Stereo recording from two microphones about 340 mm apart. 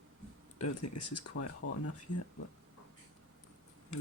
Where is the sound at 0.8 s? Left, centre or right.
Left.